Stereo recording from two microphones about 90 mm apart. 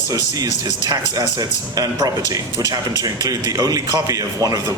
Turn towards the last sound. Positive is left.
turn(degrees=-40)  # may be behind; listen again after turning